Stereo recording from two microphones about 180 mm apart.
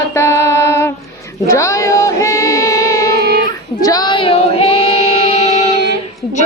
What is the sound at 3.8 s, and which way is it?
Female singing, 20° left (ahead or behind).